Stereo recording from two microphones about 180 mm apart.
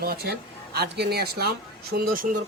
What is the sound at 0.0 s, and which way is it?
Speech, 60° right (ahead or behind).